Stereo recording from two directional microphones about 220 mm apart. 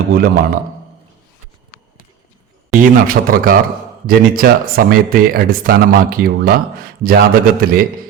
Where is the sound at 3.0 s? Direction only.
40° right (ahead or behind).